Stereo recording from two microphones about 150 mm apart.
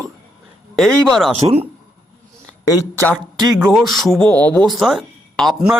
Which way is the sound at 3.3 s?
25° right (ahead or behind).